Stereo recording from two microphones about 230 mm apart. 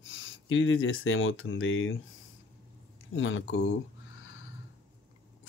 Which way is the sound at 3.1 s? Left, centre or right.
Left.